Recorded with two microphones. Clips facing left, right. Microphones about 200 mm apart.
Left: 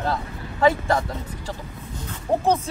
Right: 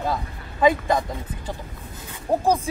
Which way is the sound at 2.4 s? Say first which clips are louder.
Even; 15° right (ahead or behind).